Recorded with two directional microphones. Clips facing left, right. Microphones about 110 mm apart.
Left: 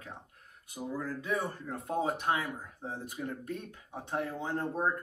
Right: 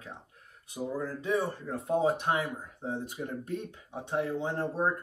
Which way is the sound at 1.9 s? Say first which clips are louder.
Right 4 dB; 30° right (ahead or behind).